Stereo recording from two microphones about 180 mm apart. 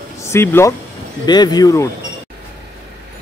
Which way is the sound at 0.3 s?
15° left (ahead or behind).